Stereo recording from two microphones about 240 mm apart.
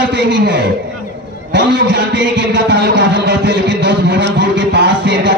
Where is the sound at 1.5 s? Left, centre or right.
Right.